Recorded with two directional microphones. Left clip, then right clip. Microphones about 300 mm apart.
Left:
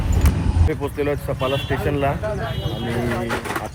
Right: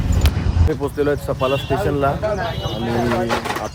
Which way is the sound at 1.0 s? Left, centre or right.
Centre.